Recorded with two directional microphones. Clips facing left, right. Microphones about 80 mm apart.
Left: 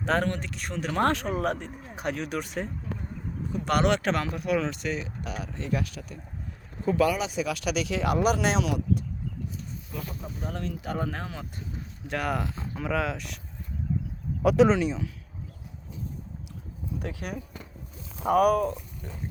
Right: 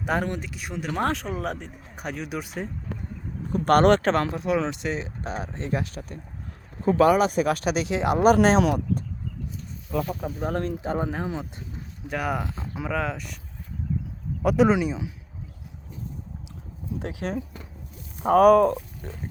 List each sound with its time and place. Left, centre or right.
0.0 s speech: centre
3.5 s speech: right
8.2 s speech: right
9.5 s a sound: centre
9.9 s speech: right
10.4 s speech: right
10.8 s speech: right
12.0 s speech: centre
14.4 s speech: centre
17.2 s speech: right
18.3 s speech: right